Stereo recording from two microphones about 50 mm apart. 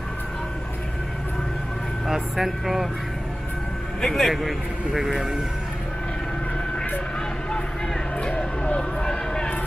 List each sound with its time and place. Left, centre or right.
2.0 s a man's voice: centre
4.0 s a man's voice: centre
8.2 s a sound: centre